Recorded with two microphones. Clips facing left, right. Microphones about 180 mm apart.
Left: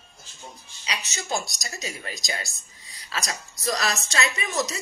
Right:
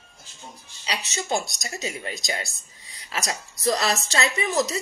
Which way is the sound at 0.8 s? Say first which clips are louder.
Right 4 dB; 25° right (ahead or behind).